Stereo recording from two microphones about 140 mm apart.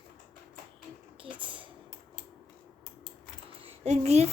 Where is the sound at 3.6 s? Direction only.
50° right (ahead or behind).